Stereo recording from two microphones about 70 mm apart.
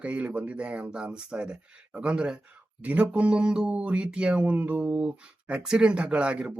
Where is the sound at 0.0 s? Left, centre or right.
Centre.